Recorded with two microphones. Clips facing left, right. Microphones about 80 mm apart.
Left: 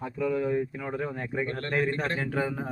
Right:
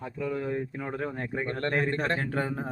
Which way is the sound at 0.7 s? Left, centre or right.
Right.